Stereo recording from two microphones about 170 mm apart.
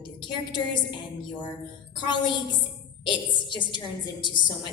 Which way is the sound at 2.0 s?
30° left (ahead or behind).